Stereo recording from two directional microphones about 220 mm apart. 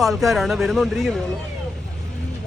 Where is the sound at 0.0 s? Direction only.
Centre (ahead or behind).